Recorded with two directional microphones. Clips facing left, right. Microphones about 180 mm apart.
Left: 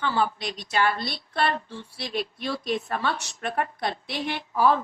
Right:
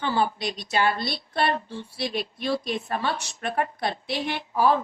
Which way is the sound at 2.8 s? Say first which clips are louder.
Even; 15° right (ahead or behind).